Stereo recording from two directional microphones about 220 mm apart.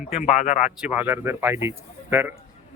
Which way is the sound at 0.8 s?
10° right (ahead or behind).